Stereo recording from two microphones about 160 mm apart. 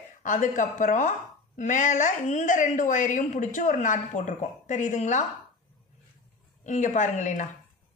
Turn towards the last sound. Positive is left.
turn(degrees=50)  # may be behind; listen again after turning